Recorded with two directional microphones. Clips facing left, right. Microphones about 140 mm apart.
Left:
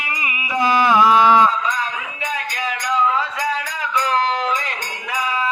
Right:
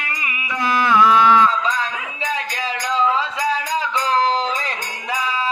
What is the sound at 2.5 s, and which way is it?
Music, 25° right (ahead or behind).